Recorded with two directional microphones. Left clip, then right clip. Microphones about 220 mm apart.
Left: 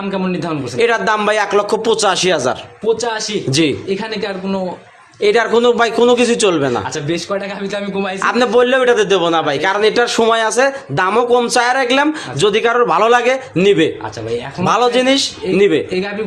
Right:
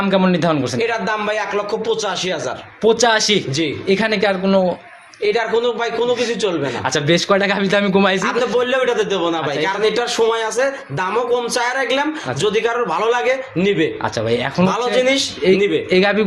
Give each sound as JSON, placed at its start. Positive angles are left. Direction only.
{"t": 0.1, "sound": "a man's voice", "side_deg": -25}
{"t": 0.8, "sound": "a man's voice", "side_deg": 50}
{"t": 2.8, "sound": "a man's voice", "side_deg": -30}
{"t": 5.2, "sound": "a man's voice", "side_deg": 50}
{"t": 6.9, "sound": "a man's voice", "side_deg": -25}
{"t": 8.2, "sound": "a man's voice", "side_deg": 45}
{"t": 15.9, "sound": "a man's voice", "side_deg": -30}